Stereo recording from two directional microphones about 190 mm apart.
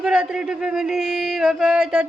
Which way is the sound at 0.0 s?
5° right (ahead or behind).